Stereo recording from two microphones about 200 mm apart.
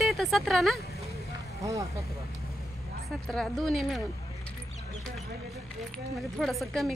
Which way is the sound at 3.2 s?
5° left (ahead or behind).